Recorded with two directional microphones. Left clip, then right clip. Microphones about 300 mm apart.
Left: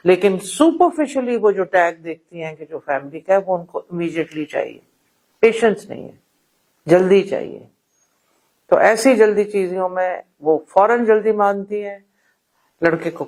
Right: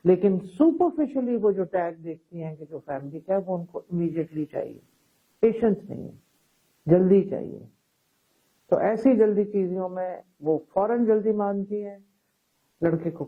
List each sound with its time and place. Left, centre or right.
0.0 s a man's voice: centre
8.7 s a man's voice: centre